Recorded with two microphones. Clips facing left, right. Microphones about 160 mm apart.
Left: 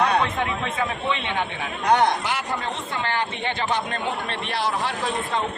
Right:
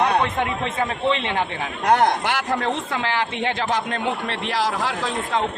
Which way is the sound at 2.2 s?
70° right (ahead or behind).